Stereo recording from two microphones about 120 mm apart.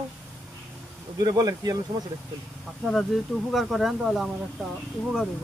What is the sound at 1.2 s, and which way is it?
Speech, 30° right (ahead or behind).